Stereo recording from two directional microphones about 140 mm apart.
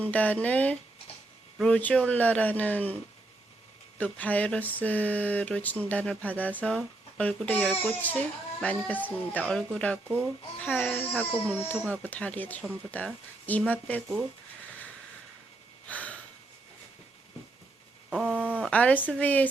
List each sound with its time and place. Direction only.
0.0 s speech: 10° left (ahead or behind)
10.1 s speech: 15° right (ahead or behind)
10.6 s speech: 10° left (ahead or behind)
15.9 s a sound: 10° left (ahead or behind)
18.1 s a sound: 5° right (ahead or behind)
18.6 s speech: 10° left (ahead or behind)